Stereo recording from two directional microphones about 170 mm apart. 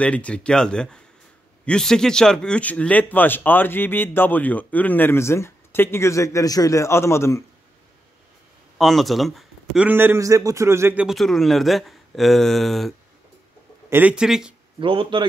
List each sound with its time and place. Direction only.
0.0 s speech: 5° left (ahead or behind)
8.7 s speech: centre (ahead or behind)
11.1 s speech: centre (ahead or behind)
13.8 s speech: 10° right (ahead or behind)
14.8 s speech: 30° right (ahead or behind)